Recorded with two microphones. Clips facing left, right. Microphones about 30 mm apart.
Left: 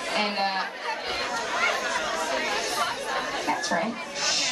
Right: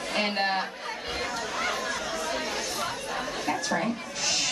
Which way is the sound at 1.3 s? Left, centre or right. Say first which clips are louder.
Left 5 dB; left.